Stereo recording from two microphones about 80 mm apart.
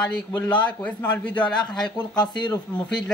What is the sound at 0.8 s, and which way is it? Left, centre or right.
Speech, centre.